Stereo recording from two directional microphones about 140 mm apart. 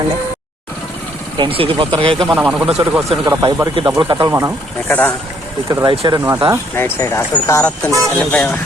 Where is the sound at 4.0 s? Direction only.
35° right (ahead or behind).